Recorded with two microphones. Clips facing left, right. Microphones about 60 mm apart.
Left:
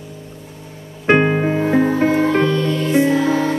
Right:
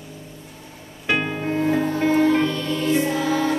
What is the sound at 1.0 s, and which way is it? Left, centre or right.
Music, left.